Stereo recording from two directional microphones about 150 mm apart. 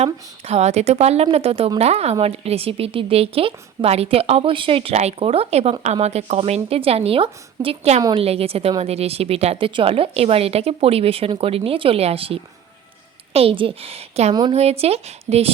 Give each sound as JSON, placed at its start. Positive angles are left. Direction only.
{"t": 0.0, "sound": "a woman's voice", "side_deg": -45}